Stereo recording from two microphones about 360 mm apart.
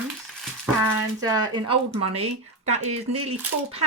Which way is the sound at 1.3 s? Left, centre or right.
Centre.